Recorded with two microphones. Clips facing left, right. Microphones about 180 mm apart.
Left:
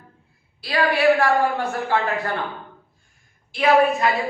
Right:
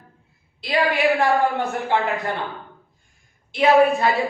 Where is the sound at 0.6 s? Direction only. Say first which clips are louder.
Left 1 dB; 20° right (ahead or behind).